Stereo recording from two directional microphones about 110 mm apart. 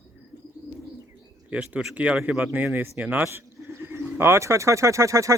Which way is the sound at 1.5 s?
15° right (ahead or behind).